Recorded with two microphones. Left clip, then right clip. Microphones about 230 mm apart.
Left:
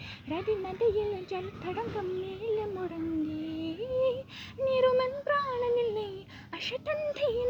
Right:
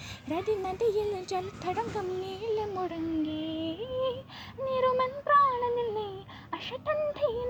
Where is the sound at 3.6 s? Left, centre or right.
Right.